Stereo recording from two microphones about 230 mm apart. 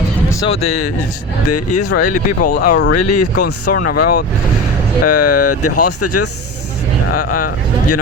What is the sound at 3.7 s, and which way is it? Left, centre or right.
Speech, left.